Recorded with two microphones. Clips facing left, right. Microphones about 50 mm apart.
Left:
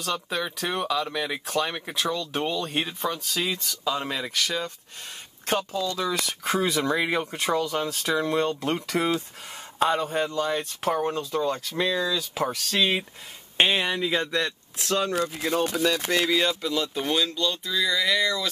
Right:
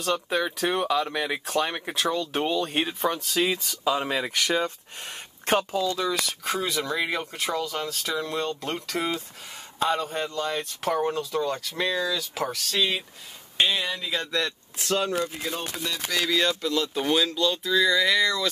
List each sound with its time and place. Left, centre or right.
0.0 s speech: centre
4.3 s speech: right
5.9 s speech: centre
12.1 s speech: centre
13.6 s speech: left
14.0 s speech: centre
14.8 s speech: centre
16.2 s speech: centre